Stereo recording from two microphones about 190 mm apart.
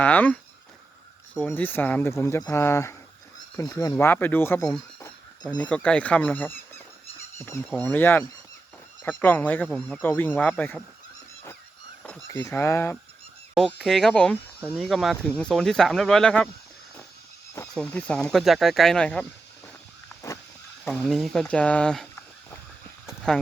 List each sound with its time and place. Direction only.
0.0 s speech: 10° left (ahead or behind)
4.9 s a sound: 15° left (ahead or behind)
7.3 s speech: 15° left (ahead or behind)
12.3 s speech: 15° left (ahead or behind)
13.5 s speech: centre (ahead or behind)
17.5 s speech: 10° left (ahead or behind)
20.8 s speech: 5° left (ahead or behind)
22.1 s a sound: 15° left (ahead or behind)